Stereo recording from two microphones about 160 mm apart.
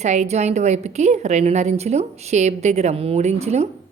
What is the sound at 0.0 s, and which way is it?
Speech, 45° right (ahead or behind).